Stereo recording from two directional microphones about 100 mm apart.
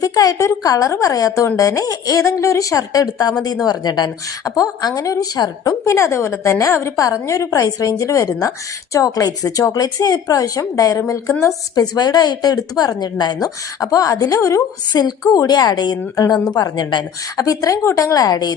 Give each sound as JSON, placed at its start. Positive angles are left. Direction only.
{"t": 0.0, "sound": "a woman's voice", "side_deg": 40}